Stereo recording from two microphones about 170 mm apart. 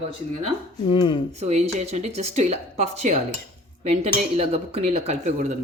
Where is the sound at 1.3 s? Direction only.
40° right (ahead or behind).